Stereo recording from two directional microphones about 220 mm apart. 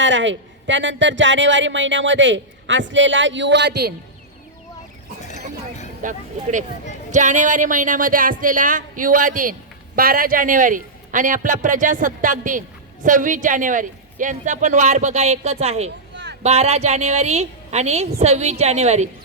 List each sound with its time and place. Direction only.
0.0 s a man's voice: 55° right (ahead or behind)
6.0 s a woman's voice: 35° right (ahead or behind)